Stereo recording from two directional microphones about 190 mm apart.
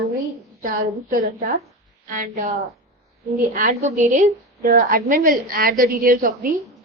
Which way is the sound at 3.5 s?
40° right (ahead or behind).